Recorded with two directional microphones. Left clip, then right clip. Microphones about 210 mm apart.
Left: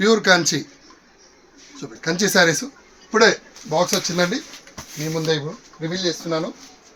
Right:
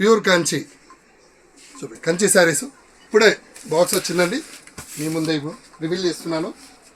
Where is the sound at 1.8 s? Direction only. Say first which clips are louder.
Right 2 dB; 20° left (ahead or behind).